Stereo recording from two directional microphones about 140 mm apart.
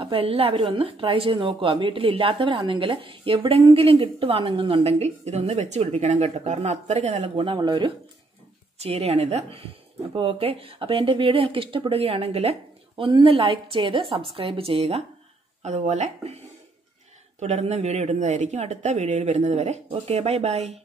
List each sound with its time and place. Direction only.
0.0 s speech: 40° right (ahead or behind)
7.4 s speech: 35° right (ahead or behind)
8.7 s speech: 50° right (ahead or behind)
17.4 s speech: 55° right (ahead or behind)